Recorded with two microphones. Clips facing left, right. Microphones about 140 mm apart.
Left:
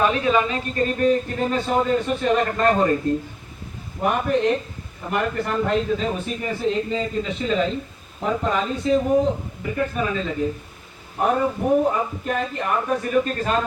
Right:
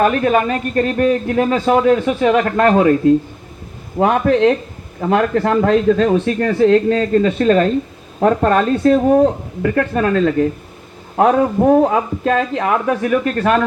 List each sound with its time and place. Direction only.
0.0 s a man's voice: 50° right (ahead or behind); by 2.9 s 70° right (ahead or behind)
3.9 s a man's voice: 90° right; by 13.6 s 65° right (ahead or behind)